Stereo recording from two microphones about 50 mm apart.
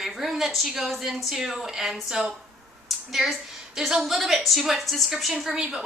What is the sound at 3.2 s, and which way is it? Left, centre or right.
Speech, centre.